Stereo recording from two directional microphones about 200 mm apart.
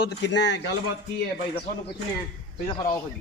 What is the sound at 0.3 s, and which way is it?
Speech, 60° left (ahead or behind).